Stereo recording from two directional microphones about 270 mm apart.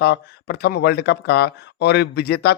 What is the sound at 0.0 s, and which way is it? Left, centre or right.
Speech, left.